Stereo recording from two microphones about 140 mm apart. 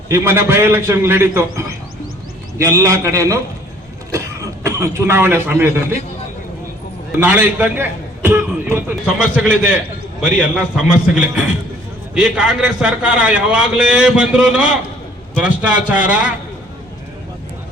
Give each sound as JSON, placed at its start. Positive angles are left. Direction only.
{"t": 0.1, "sound": "a man's voice", "side_deg": -15}
{"t": 4.6, "sound": "a man's voice", "side_deg": -20}
{"t": 7.2, "sound": "a man's voice", "side_deg": -10}